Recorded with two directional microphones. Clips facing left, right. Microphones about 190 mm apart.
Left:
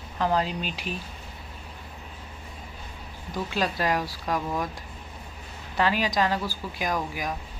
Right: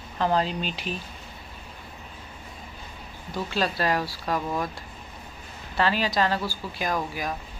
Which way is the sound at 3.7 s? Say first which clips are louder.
Right 1 dB; 15° left (ahead or behind).